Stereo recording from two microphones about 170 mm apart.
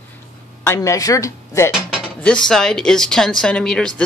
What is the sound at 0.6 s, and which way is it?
Speech, 15° left (ahead or behind).